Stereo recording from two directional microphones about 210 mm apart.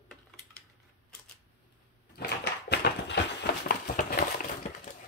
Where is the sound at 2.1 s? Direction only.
50° left (ahead or behind).